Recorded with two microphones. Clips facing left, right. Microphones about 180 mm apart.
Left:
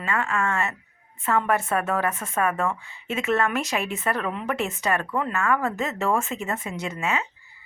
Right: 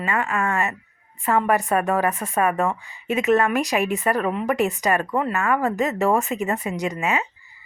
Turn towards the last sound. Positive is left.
turn(degrees=-15)  # may be behind; listen again after turning